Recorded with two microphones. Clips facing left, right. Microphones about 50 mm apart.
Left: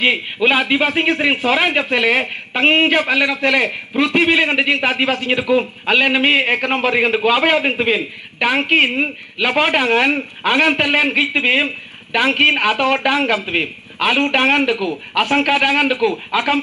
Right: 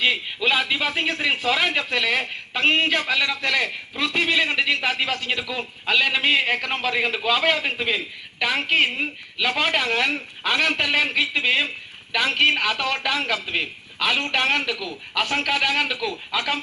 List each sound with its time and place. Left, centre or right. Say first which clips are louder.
0.0 s a man's voice: left 6 dB; left